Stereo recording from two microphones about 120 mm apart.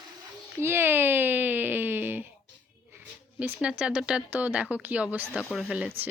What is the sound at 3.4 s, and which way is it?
Speech, 10° right (ahead or behind).